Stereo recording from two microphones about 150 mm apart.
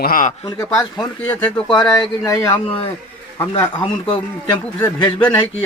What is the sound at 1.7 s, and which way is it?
A man's voice, 30° left (ahead or behind).